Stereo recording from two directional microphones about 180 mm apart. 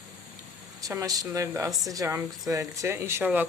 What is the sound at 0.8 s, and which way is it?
Speech, 20° right (ahead or behind).